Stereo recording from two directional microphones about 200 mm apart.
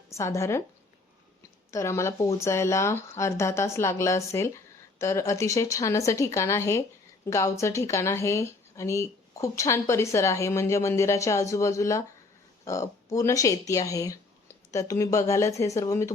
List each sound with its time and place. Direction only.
0.1 s speech: 15° left (ahead or behind)
1.7 s speech: 15° left (ahead or behind)